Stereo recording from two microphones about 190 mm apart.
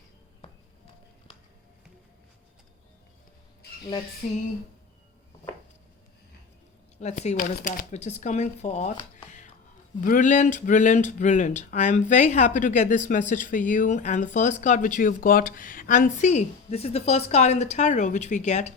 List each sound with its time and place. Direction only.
7.0 s speech: 35° left (ahead or behind)